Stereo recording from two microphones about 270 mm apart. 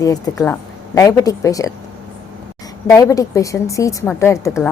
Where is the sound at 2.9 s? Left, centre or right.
Centre.